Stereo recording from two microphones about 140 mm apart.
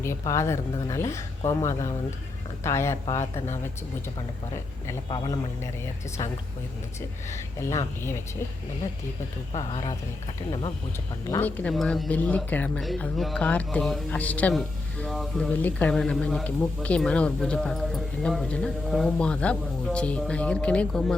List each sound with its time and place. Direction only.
0.0 s speech: 20° left (ahead or behind)
7.6 s speech: 20° left (ahead or behind)
9.5 s speech: 35° left (ahead or behind)
11.3 s speech: 15° left (ahead or behind)
11.7 s speech: centre (ahead or behind)